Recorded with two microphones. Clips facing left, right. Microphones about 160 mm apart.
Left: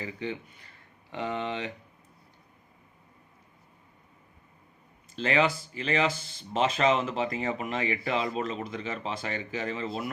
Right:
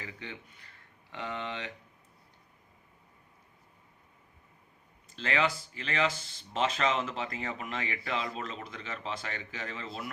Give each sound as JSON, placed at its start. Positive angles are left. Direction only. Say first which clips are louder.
{"t": 0.0, "sound": "speech", "louder": "left 9 dB", "side_deg": 20}
{"t": 5.1, "sound": "speech", "louder": "left 5 dB", "side_deg": 20}